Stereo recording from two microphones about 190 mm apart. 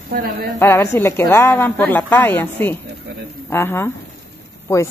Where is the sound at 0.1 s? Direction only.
50° right (ahead or behind).